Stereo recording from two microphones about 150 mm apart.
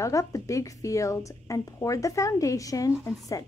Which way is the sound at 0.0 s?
20° left (ahead or behind).